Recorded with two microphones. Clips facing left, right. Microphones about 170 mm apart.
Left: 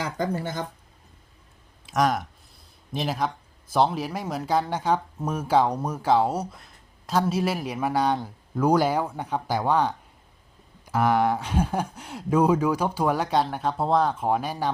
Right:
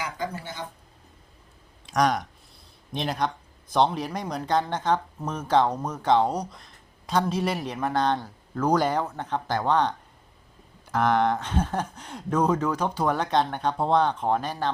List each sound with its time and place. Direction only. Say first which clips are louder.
0.2 s speech: left 5 dB; 50° left (ahead or behind)
1.9 s speech: even; 5° left (ahead or behind)